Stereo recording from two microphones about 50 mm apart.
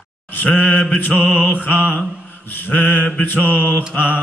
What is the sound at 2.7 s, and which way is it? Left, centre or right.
Music, left.